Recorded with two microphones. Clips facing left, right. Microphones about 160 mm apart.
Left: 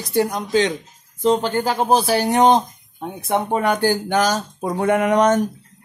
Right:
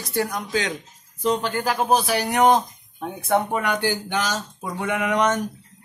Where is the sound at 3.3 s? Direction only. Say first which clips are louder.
Left 3 dB; 30° left (ahead or behind).